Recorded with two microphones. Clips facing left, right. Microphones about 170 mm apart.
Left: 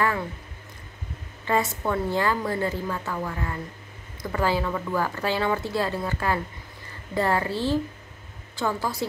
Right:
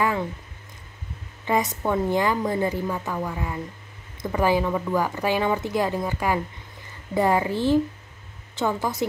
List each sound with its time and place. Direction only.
1.4 s a woman's voice: 15° right (ahead or behind)